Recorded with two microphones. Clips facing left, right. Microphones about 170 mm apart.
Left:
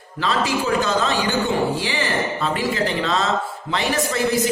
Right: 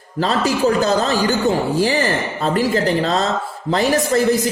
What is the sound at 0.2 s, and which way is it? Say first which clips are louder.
A man's voice: right 4 dB; 40° right (ahead or behind).